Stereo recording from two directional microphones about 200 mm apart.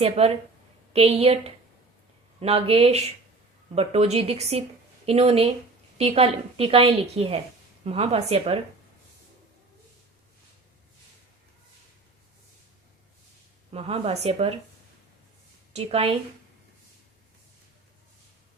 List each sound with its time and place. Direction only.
0.0 s a woman's voice: 30° right (ahead or behind)
13.7 s a woman's voice: 30° right (ahead or behind)
15.7 s a woman's voice: 30° right (ahead or behind)